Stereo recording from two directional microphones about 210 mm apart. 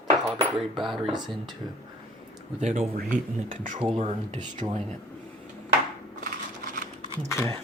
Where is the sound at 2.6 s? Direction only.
35° right (ahead or behind).